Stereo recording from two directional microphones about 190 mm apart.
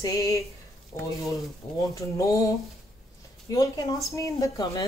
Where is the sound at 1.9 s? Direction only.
15° left (ahead or behind).